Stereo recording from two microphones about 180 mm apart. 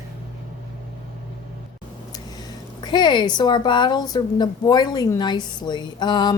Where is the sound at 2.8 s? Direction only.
25° left (ahead or behind).